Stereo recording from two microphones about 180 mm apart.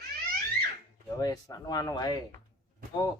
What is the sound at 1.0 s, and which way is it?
Speech, 20° left (ahead or behind).